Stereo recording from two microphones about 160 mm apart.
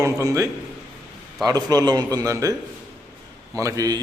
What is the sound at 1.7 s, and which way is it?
A man's voice, 25° right (ahead or behind).